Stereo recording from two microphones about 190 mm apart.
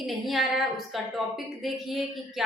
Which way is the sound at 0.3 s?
Centre (ahead or behind).